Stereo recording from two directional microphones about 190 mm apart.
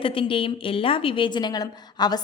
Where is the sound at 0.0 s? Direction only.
30° left (ahead or behind).